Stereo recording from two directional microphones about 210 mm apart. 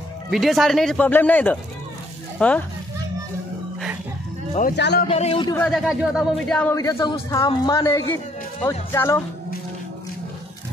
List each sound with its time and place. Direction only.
0.3 s speech: centre (ahead or behind)
4.6 s speech: 50° left (ahead or behind)
5.0 s a man's voice: 30° left (ahead or behind)
5.5 s speech: 5° left (ahead or behind)